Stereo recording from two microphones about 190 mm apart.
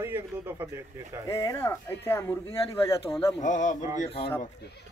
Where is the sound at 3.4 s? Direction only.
40° left (ahead or behind).